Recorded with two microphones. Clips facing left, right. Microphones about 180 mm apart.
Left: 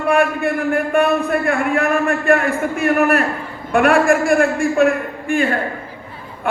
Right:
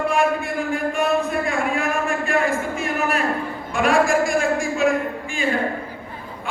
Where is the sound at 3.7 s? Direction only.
60° left (ahead or behind).